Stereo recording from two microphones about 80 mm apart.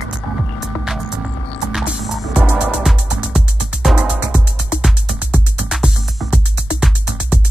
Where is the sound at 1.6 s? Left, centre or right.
Centre.